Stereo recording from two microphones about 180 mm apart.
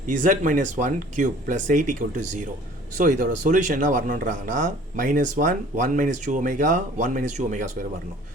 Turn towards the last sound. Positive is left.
turn(degrees=-45)  # may be behind; listen again after turning